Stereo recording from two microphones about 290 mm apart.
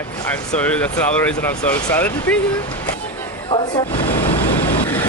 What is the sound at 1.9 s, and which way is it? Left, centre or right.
Speech, centre.